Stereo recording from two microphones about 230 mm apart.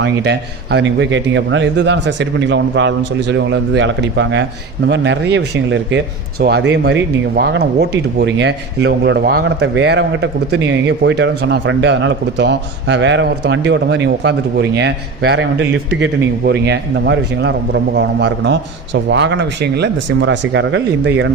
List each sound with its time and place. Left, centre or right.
0.0 s a man's voice: right